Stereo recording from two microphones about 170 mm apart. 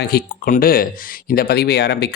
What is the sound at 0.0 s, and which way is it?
Speech, 65° left (ahead or behind).